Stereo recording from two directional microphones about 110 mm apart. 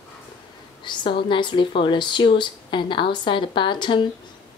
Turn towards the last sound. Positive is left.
turn(degrees=45)  # may be behind; listen again after turning